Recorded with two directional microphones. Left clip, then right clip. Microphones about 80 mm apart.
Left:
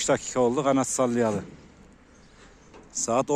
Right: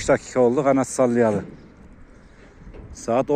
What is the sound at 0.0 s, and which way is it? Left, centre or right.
Speech, left.